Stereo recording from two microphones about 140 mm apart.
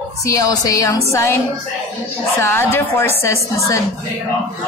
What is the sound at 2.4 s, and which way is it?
Speech, 15° left (ahead or behind).